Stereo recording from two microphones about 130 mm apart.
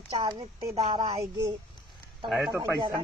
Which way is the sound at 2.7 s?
35° right (ahead or behind).